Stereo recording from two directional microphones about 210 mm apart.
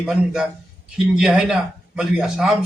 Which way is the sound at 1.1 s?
5° right (ahead or behind).